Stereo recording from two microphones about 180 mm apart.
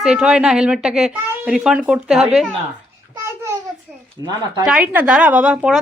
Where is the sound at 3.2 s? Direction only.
15° right (ahead or behind).